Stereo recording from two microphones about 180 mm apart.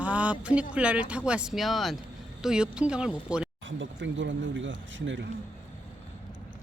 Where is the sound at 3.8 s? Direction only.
90° right.